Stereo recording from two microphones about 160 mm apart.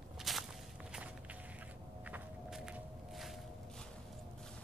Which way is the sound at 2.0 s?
5° right (ahead or behind).